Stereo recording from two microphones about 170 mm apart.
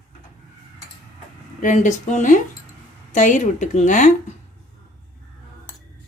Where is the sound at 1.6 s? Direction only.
45° left (ahead or behind).